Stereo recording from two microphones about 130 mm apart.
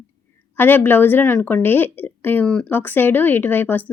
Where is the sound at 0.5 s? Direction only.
15° left (ahead or behind).